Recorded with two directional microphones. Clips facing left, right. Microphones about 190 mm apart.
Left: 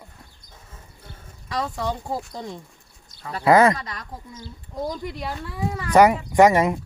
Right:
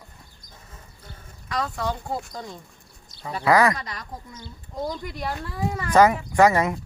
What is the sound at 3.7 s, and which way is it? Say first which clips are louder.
Speech: left 1 dB; centre (ahead or behind).